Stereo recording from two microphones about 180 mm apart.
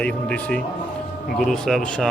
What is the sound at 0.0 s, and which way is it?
A man's voice, 5° left (ahead or behind).